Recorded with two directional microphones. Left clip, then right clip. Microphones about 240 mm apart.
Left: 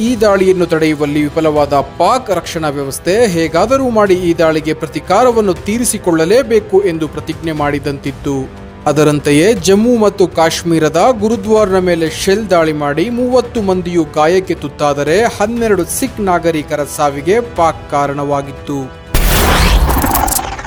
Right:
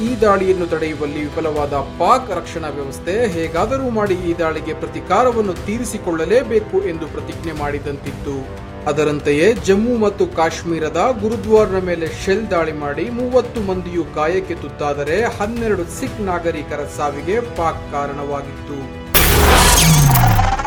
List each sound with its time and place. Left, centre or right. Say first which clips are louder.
0.2 s speech: left 4 dB; left
19.1 s music: even; centre